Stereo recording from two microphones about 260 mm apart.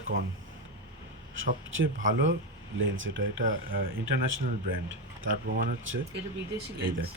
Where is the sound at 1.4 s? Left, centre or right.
Right.